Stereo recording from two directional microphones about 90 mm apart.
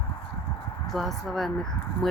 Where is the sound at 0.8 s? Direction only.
Centre (ahead or behind).